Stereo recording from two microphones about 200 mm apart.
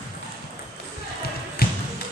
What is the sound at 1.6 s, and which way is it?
Music, 50° left (ahead or behind).